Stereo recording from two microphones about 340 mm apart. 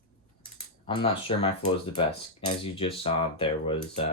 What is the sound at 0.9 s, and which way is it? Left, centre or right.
Speech, centre.